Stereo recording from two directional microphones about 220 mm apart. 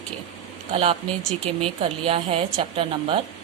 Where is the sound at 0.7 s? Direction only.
25° right (ahead or behind).